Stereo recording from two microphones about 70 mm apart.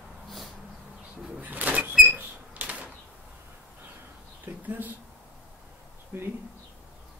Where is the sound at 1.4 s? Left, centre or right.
Right.